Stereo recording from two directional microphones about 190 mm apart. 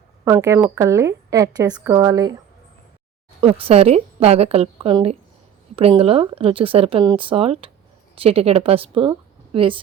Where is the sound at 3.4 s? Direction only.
30° right (ahead or behind).